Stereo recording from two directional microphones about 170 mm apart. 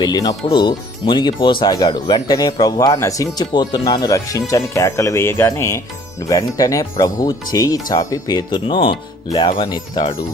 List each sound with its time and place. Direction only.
0.0 s speech: 25° left (ahead or behind)